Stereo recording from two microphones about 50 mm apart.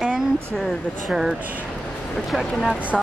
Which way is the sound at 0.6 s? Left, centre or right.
Centre.